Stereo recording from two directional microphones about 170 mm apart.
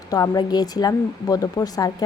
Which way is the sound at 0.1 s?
20° left (ahead or behind).